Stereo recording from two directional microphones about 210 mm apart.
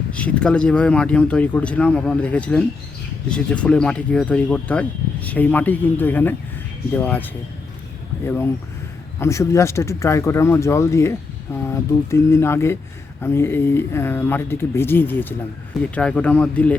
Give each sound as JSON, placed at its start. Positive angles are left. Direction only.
{"t": 0.1, "sound": "speech", "side_deg": 5}